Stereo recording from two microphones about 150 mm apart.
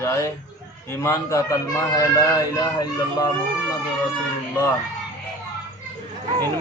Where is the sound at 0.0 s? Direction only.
15° left (ahead or behind).